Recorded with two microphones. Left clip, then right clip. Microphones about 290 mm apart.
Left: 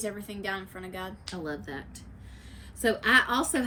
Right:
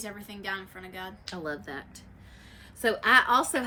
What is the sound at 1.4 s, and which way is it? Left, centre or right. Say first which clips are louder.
A woman's voice: right 2 dB; centre.